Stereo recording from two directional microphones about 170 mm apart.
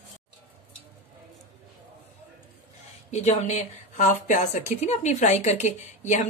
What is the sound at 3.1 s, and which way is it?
Speech, 40° left (ahead or behind).